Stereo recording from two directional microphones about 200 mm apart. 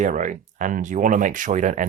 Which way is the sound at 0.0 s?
40° right (ahead or behind).